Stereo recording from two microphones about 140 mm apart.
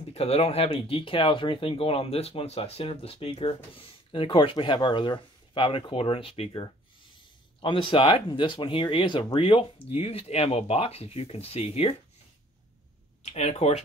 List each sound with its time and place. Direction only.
0.1 s speech: 45° left (ahead or behind)
13.2 s speech: 50° left (ahead or behind)